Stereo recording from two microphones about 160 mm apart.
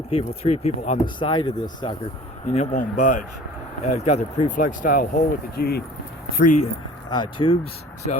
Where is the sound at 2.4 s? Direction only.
45° left (ahead or behind).